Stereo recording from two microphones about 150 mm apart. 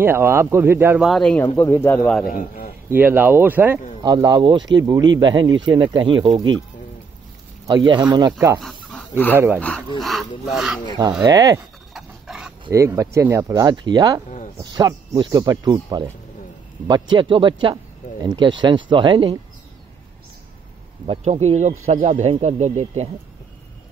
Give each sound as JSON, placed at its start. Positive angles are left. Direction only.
{"t": 0.0, "sound": "speech", "side_deg": -15}
{"t": 1.0, "sound": "speech", "side_deg": 5}
{"t": 2.2, "sound": "a man's voice", "side_deg": 70}
{"t": 2.9, "sound": "speech", "side_deg": -15}
{"t": 4.0, "sound": "speech", "side_deg": -30}
{"t": 7.6, "sound": "speech", "side_deg": -30}
{"t": 8.3, "sound": "speech", "side_deg": -20}
{"t": 9.9, "sound": "speech", "side_deg": 0}
{"t": 11.2, "sound": "speech", "side_deg": -20}
{"t": 11.9, "sound": "dog", "side_deg": -5}
{"t": 12.7, "sound": "speech", "side_deg": -20}
{"t": 21.1, "sound": "speech", "side_deg": -45}